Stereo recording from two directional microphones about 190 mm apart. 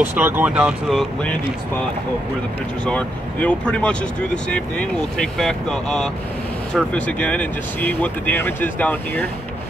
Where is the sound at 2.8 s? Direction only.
5° left (ahead or behind).